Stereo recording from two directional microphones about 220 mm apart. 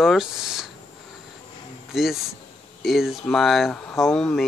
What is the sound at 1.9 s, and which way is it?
Speech, centre (ahead or behind).